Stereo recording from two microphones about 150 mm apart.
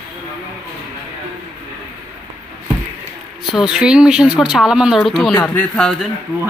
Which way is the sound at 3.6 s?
5° right (ahead or behind).